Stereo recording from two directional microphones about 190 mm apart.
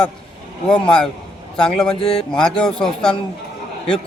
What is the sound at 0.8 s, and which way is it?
Speech, 5° left (ahead or behind).